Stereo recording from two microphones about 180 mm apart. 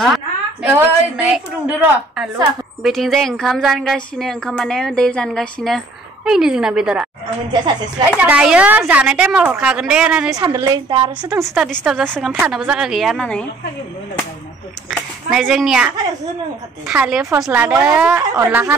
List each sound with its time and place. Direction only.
0.0 s a sound: centre (ahead or behind)
0.7 s a woman's voice: 10° right (ahead or behind)
8.2 s a woman's voice: 5° right (ahead or behind)
10.3 s a woman's voice: 20° right (ahead or behind)
11.4 s a woman's voice: centre (ahead or behind)
14.9 s a woman's voice: centre (ahead or behind)